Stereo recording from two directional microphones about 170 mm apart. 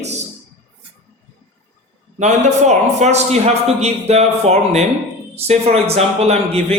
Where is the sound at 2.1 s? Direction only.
45° right (ahead or behind).